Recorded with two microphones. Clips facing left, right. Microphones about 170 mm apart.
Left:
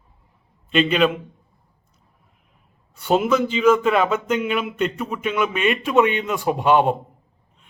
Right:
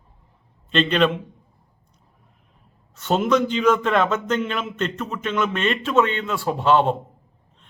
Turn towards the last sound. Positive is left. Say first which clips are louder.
# left 1 dB
turn(degrees=15)  # may be behind; listen again after turning